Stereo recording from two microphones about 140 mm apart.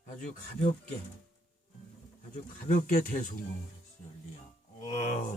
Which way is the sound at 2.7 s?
70° left (ahead or behind).